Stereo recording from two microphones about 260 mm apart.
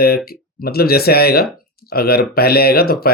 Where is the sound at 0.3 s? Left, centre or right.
Left.